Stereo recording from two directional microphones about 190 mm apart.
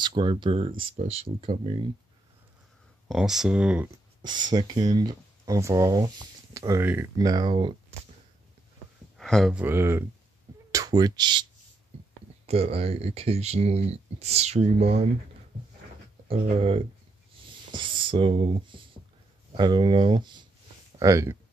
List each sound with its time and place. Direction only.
0.0 s speech: 25° right (ahead or behind)
3.1 s speech: centre (ahead or behind)
4.2 s speech: 20° right (ahead or behind)
9.2 s speech: centre (ahead or behind); by 11.4 s 20° right (ahead or behind)
12.4 s speech: 30° right (ahead or behind)
16.3 s speech: 30° right (ahead or behind)